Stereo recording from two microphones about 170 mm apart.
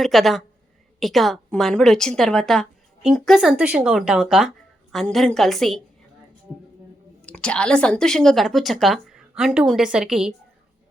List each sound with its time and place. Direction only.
0.0 s a woman's voice: centre (ahead or behind)
7.3 s a woman's voice: 5° left (ahead or behind)